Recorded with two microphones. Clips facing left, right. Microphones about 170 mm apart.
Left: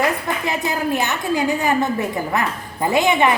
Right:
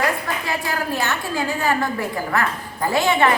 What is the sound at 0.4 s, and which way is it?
A woman's voice, 20° left (ahead or behind).